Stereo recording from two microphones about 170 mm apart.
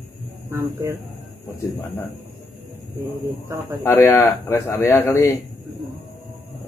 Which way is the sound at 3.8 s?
15° left (ahead or behind).